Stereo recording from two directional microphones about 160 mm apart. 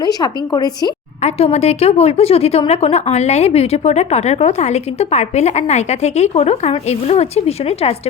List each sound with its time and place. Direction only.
0.0 s a woman's voice: 25° left (ahead or behind)
1.2 s a woman's voice: 40° left (ahead or behind)